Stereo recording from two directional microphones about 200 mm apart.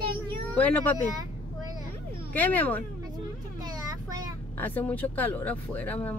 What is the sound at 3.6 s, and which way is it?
Child singing, 20° right (ahead or behind).